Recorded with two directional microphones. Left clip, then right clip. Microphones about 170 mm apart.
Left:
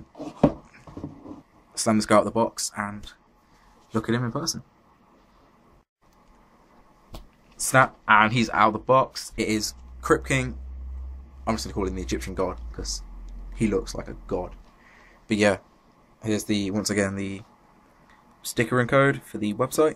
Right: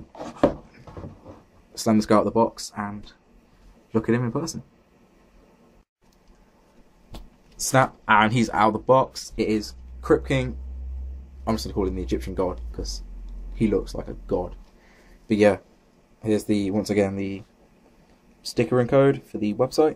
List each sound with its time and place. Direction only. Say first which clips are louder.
1.7 s speech: even; 10° right (ahead or behind)
7.1 s speech: right 1 dB; 15° right (ahead or behind)
9.3 s speech: right 2 dB; 5° left (ahead or behind)
11.4 s speech: right 2 dB; 15° right (ahead or behind)
18.5 s speech: right 1 dB; centre (ahead or behind)